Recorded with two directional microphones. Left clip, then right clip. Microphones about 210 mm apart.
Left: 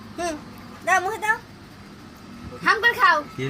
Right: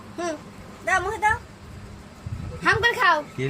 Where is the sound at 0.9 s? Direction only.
25° right (ahead or behind).